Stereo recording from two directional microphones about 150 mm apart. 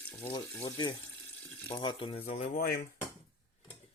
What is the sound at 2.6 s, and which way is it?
Dishes, 80° left.